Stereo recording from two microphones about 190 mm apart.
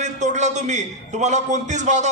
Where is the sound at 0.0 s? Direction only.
40° right (ahead or behind).